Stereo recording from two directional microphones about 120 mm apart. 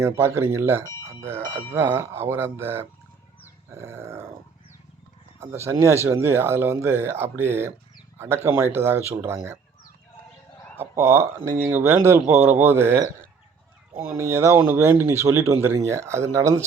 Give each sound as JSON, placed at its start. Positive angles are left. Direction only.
{"t": 0.0, "sound": "speech", "side_deg": -20}
{"t": 5.4, "sound": "speech", "side_deg": -20}
{"t": 10.8, "sound": "speech", "side_deg": -20}
{"t": 12.4, "sound": "speech", "side_deg": -70}
{"t": 12.6, "sound": "speech", "side_deg": -20}